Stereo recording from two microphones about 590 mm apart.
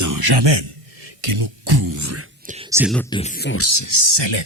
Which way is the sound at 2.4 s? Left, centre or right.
Centre.